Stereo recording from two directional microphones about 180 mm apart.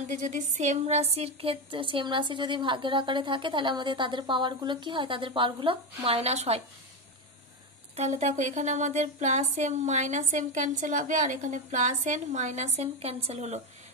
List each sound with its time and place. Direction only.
0.0 s a woman's voice: 45° right (ahead or behind)
8.2 s speech: 40° right (ahead or behind)